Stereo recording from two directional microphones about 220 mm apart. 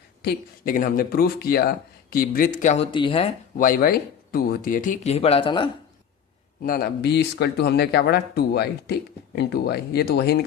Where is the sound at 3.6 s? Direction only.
40° left (ahead or behind); by 5.7 s 20° left (ahead or behind).